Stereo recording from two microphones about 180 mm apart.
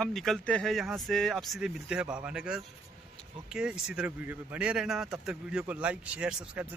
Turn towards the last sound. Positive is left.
turn(degrees=-5)  # may be behind; listen again after turning